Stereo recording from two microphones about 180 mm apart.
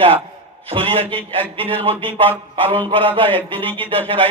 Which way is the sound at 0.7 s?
30° right (ahead or behind).